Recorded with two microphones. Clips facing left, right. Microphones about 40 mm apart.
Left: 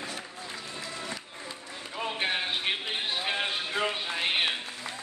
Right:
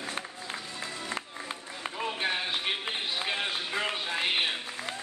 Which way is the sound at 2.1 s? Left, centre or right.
Left.